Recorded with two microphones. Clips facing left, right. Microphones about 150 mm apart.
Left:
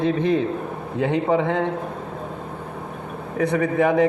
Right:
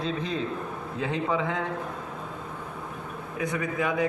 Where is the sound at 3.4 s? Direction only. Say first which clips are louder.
Left 9 dB; 65° left (ahead or behind).